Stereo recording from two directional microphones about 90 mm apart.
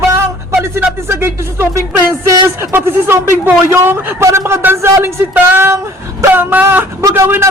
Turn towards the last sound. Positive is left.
turn(degrees=-25)  # may be behind; listen again after turning